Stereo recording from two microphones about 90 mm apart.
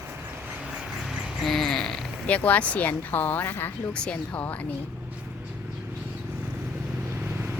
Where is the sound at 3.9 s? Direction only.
10° left (ahead or behind).